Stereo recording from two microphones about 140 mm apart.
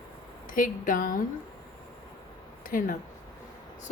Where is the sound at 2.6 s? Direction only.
80° left.